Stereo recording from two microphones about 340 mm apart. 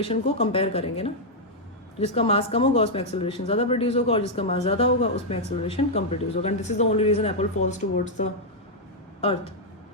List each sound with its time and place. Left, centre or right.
0.0 s speech: centre